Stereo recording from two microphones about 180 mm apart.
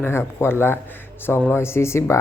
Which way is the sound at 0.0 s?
15° left (ahead or behind).